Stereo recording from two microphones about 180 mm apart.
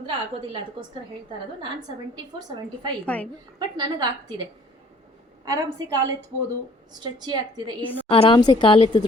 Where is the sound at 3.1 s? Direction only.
10° left (ahead or behind).